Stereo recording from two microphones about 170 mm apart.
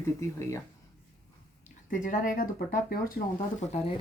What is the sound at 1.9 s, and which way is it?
Speech, 50° left (ahead or behind).